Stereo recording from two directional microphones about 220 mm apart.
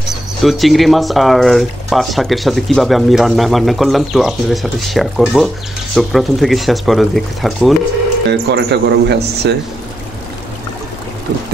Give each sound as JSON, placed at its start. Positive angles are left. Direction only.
{"t": 0.1, "sound": "speech", "side_deg": 0}
{"t": 8.3, "sound": "speech", "side_deg": -50}